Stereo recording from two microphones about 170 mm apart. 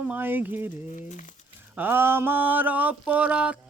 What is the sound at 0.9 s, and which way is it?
Speech, 45° left (ahead or behind).